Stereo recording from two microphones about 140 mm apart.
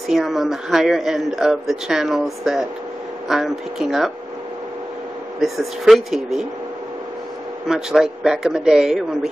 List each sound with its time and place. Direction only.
0.1 s speech: centre (ahead or behind)
5.4 s speech: centre (ahead or behind)
7.6 s speech: 5° right (ahead or behind)